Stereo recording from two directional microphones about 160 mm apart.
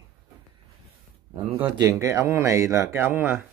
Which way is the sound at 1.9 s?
20° right (ahead or behind).